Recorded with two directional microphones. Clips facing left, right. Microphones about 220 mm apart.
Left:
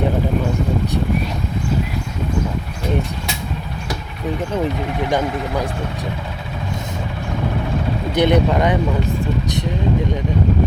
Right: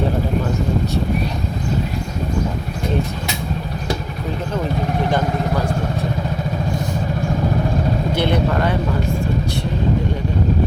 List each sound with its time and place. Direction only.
8.1 s speech: 15° left (ahead or behind)